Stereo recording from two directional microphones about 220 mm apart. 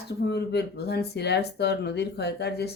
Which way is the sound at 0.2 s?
45° left (ahead or behind).